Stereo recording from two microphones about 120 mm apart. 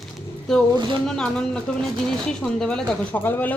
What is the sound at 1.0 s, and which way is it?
Speech, 5° left (ahead or behind).